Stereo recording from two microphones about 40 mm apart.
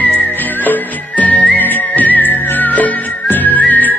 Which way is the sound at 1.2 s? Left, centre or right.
Left.